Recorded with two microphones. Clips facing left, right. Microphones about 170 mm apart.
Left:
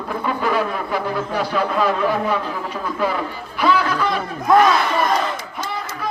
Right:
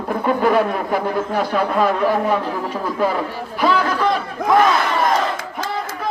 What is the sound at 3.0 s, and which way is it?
Speech, 45° right (ahead or behind).